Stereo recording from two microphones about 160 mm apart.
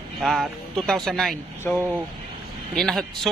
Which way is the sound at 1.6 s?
15° left (ahead or behind).